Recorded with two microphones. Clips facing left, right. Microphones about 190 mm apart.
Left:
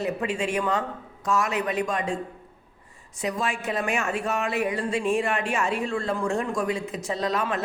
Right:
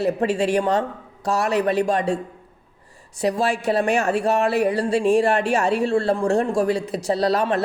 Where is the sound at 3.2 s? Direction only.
35° right (ahead or behind).